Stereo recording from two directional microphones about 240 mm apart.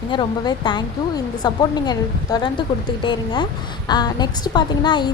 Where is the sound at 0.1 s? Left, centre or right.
Centre.